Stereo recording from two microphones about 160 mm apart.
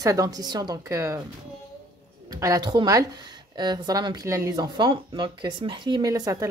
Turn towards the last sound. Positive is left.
turn(degrees=-25)  # may be behind; listen again after turning